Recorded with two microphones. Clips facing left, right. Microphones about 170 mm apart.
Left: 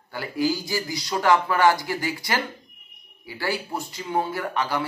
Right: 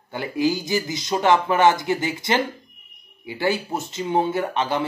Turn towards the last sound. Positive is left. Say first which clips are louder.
# right 3 dB
turn(degrees=-20)  # may be behind; listen again after turning